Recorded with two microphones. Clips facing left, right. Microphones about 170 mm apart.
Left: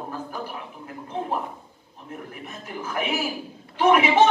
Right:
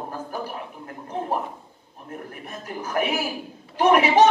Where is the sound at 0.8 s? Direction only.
45° right (ahead or behind).